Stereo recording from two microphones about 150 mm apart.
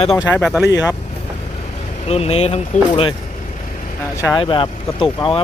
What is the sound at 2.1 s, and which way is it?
Speech, 45° left (ahead or behind).